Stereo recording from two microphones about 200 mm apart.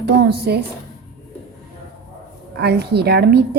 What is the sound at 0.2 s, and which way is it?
Speech, 55° right (ahead or behind).